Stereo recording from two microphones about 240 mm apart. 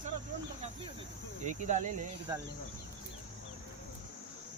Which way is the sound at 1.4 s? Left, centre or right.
Right.